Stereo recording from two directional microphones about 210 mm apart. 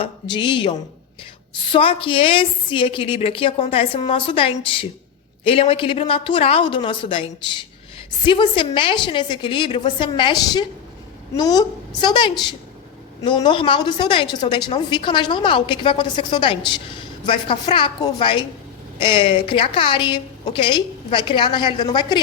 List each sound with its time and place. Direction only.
0.0 s a woman's voice: 25° left (ahead or behind)
1.7 s a woman's voice: 25° left (ahead or behind)